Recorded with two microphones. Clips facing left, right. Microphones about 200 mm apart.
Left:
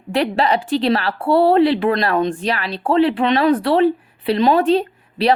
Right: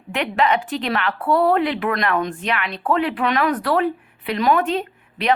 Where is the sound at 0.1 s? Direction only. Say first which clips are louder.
Left 3 dB; 35° left (ahead or behind).